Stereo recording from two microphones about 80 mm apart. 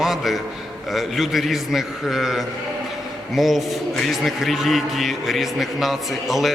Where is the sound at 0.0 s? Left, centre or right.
Centre.